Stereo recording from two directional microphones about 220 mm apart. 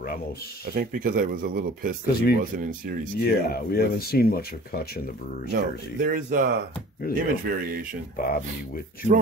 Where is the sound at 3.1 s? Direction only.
45° left (ahead or behind).